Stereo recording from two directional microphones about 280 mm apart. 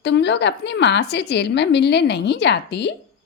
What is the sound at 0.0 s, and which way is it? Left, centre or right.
A woman's voice, left.